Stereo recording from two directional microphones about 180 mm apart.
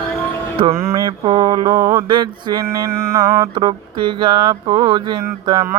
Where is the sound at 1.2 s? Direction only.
25° right (ahead or behind).